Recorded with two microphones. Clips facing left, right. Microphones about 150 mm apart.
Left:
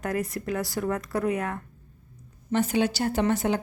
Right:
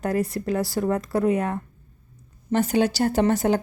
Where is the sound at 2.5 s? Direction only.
40° right (ahead or behind).